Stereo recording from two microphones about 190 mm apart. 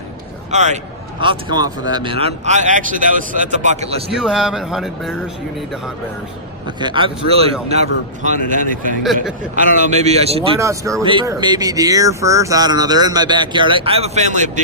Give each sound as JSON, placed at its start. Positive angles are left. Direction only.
{"t": 0.5, "sound": "speech", "side_deg": -35}
{"t": 1.2, "sound": "speech", "side_deg": -25}
{"t": 4.2, "sound": "a man's voice", "side_deg": 0}
{"t": 6.7, "sound": "speech", "side_deg": -25}
{"t": 10.6, "sound": "speech", "side_deg": -15}
{"t": 11.0, "sound": "speech", "side_deg": -25}